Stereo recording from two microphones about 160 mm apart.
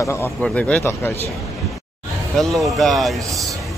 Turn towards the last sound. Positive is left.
turn(degrees=0)  # may be behind; listen again after turning